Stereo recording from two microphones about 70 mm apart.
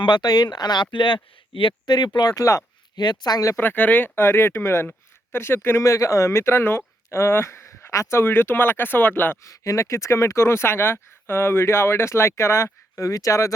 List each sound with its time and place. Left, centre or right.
0.1 s speech: left
2.1 s speech: left
2.9 s speech: left
3.6 s speech: left
5.8 s speech: left
9.4 s speech: left